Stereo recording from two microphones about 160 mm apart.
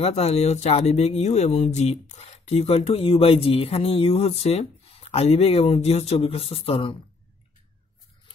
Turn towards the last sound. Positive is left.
turn(degrees=35)  # may be behind; listen again after turning